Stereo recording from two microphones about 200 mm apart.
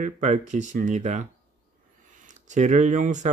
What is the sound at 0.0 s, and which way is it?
Speech, 35° right (ahead or behind).